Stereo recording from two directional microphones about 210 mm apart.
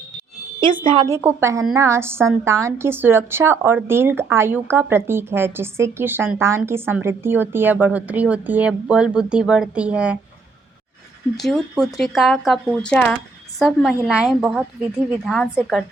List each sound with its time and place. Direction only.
0.9 s a woman's voice: 15° right (ahead or behind)
11.3 s a woman's voice: centre (ahead or behind)